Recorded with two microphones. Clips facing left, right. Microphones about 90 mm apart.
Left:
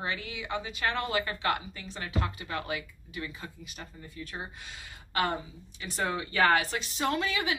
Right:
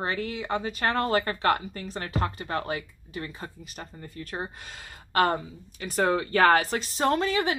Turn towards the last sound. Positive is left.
turn(degrees=-40)  # may be behind; listen again after turning